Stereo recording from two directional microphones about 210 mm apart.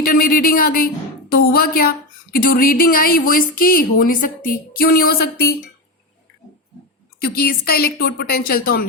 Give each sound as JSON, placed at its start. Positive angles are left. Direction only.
{"t": 0.0, "sound": "a woman's voice", "side_deg": 45}
{"t": 7.2, "sound": "a woman's voice", "side_deg": 45}